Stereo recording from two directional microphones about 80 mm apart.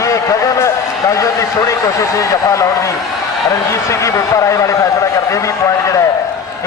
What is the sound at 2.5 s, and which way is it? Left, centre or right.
A man's voice, left.